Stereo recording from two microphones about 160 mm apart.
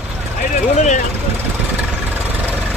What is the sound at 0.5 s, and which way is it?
Vehicle, 50° left (ahead or behind).